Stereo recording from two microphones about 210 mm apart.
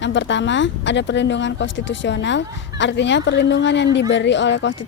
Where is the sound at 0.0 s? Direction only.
60° left (ahead or behind).